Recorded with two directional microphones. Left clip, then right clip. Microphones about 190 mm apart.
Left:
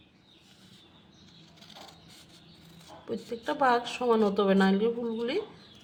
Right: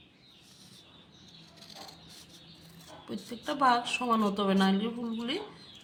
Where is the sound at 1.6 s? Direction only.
20° left (ahead or behind).